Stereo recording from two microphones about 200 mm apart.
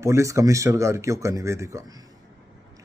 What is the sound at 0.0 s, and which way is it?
A man's voice, 15° right (ahead or behind).